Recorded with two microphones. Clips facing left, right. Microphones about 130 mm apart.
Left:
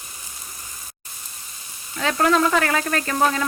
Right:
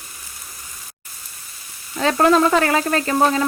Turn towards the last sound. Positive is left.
turn(degrees=-30)  # may be behind; listen again after turning